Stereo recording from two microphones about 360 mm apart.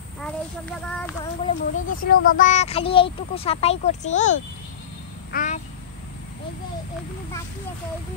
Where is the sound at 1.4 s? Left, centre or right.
Left.